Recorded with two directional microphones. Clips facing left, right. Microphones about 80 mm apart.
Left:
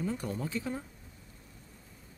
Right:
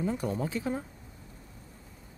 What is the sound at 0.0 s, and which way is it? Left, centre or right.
Speech, centre.